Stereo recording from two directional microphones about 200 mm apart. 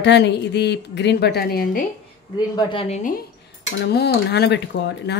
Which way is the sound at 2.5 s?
25° left (ahead or behind).